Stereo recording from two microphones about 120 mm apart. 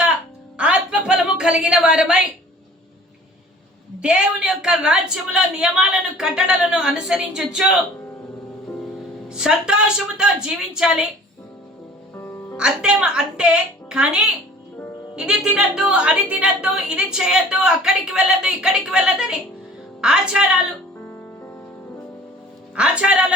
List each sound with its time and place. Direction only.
0.5 s a sound: 10° right (ahead or behind)
4.0 s speech: 5° right (ahead or behind)
9.3 s speech: 5° right (ahead or behind)
12.1 s music: 20° left (ahead or behind)
12.5 s speech: 5° right (ahead or behind)
22.7 s speech: 10° right (ahead or behind)